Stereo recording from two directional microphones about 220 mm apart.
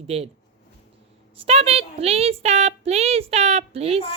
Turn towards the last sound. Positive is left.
turn(degrees=-25)  # may be behind; listen again after turning